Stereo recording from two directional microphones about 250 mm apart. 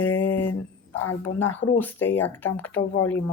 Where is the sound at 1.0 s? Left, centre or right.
Left.